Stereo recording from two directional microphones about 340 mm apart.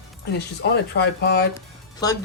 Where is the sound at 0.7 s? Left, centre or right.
Left.